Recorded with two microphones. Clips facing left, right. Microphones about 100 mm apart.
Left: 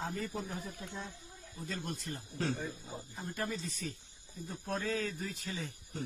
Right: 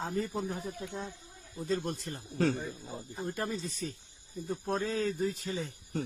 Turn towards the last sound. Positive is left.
turn(degrees=-35)  # may be behind; listen again after turning